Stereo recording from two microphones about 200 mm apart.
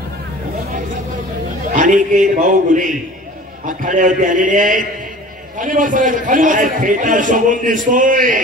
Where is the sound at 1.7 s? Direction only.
40° right (ahead or behind).